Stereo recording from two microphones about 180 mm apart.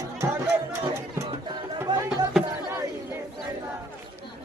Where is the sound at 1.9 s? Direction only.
25° right (ahead or behind).